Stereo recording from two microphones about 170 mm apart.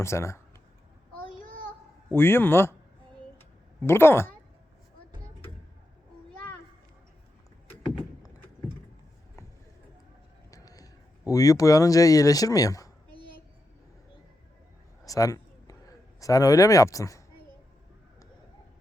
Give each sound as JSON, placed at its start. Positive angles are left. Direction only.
{"t": 0.0, "sound": "speech", "side_deg": 15}
{"t": 2.1, "sound": "speech", "side_deg": 15}
{"t": 3.8, "sound": "speech", "side_deg": 15}
{"t": 10.5, "sound": "speech", "side_deg": 20}
{"t": 15.0, "sound": "a sound", "side_deg": 20}